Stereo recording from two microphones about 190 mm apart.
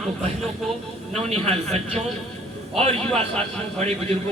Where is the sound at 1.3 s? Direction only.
35° right (ahead or behind).